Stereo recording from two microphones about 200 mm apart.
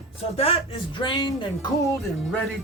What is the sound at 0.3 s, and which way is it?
Speech, 30° left (ahead or behind).